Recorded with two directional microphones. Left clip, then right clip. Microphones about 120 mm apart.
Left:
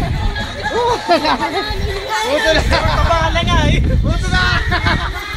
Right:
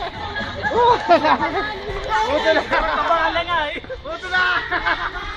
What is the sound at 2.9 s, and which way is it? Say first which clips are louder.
Vehicle: left 2 dB; 40° left (ahead or behind).